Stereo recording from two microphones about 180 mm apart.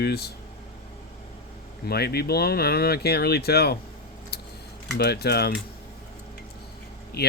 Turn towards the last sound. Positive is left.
turn(degrees=60)  # may be behind; listen again after turning